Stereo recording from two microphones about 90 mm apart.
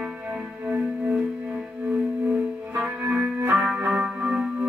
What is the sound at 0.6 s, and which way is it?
Music, 15° right (ahead or behind).